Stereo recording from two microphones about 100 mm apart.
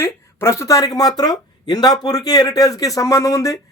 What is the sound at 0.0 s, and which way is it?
Speech, 25° left (ahead or behind).